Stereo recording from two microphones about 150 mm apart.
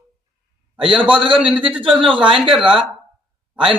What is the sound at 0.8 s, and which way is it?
Speech, 35° right (ahead or behind).